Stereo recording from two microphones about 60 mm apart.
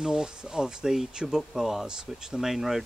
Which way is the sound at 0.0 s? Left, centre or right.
Centre.